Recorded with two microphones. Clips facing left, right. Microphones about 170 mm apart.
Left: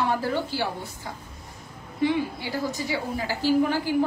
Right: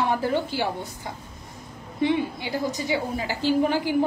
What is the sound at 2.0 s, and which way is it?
A woman's voice, 20° right (ahead or behind).